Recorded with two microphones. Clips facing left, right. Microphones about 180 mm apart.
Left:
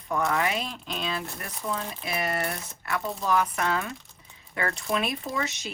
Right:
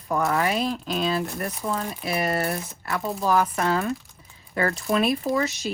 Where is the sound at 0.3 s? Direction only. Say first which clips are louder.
Right 4 dB; 35° right (ahead or behind).